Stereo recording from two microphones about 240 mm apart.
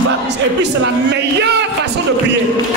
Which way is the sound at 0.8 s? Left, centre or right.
Right.